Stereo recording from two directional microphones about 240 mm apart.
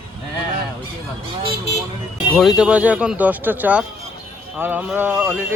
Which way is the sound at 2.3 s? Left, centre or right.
Centre.